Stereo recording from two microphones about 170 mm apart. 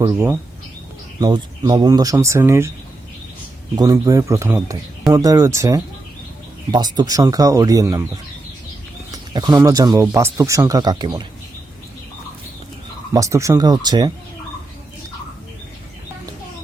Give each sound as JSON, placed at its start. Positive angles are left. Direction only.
{"t": 1.2, "sound": "speech", "side_deg": -25}
{"t": 3.8, "sound": "speech", "side_deg": -20}
{"t": 9.1, "sound": "speech", "side_deg": -20}
{"t": 13.1, "sound": "speech", "side_deg": -20}